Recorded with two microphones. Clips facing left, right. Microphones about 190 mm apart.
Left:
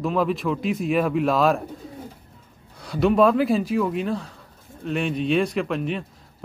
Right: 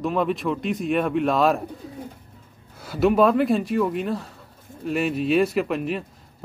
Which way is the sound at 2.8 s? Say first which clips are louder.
Even; 5° right (ahead or behind).